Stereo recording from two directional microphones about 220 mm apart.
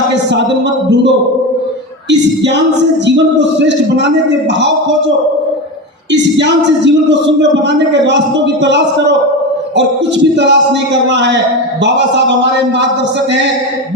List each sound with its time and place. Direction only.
3.2 s a man's voice: 55° right (ahead or behind)
6.3 s a man's voice: 55° right (ahead or behind)
10.3 s a man's voice: 55° right (ahead or behind)